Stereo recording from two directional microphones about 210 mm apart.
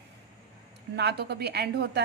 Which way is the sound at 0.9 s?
50° right (ahead or behind).